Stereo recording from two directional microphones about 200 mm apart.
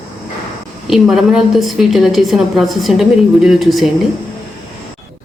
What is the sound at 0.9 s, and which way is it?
A woman's voice, centre (ahead or behind).